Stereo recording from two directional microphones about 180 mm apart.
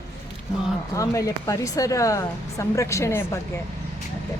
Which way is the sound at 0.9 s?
20° left (ahead or behind).